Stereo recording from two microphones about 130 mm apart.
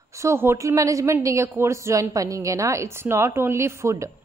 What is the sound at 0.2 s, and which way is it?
A woman's voice, 20° right (ahead or behind).